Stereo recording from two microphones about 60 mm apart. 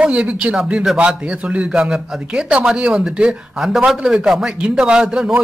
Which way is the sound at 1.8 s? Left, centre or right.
Centre.